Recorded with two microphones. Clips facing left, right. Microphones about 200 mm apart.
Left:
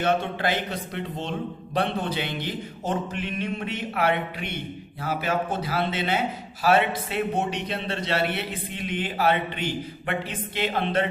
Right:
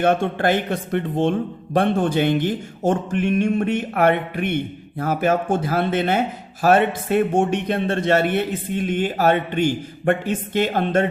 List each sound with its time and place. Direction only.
0.0 s a man's voice: 50° right (ahead or behind)